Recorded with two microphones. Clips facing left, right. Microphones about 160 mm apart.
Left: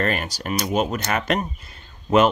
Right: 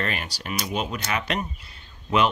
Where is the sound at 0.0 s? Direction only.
45° left (ahead or behind).